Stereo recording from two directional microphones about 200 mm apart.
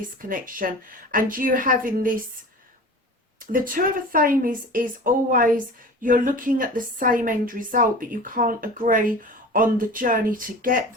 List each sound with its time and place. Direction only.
0.2 s a woman's voice: 45° right (ahead or behind)
3.4 s a woman's voice: 45° right (ahead or behind)